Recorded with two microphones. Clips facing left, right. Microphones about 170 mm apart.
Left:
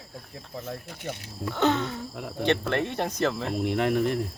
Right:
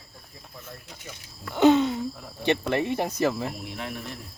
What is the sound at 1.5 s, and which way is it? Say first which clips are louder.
Speech: right 6 dB; 15° right (ahead or behind).